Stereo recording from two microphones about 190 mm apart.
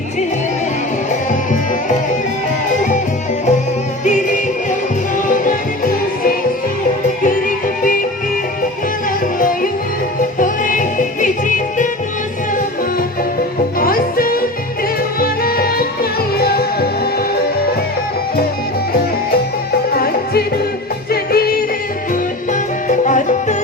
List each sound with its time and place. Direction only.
4.0 s music: 40° left (ahead or behind)
9.4 s music: 45° left (ahead or behind)
13.7 s music: 50° left (ahead or behind)
19.9 s music: 55° left (ahead or behind)